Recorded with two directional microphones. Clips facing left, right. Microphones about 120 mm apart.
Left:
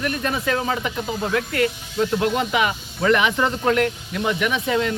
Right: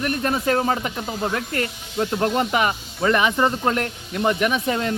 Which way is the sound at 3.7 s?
35° right (ahead or behind).